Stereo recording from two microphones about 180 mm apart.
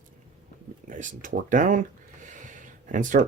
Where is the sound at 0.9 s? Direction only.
45° right (ahead or behind).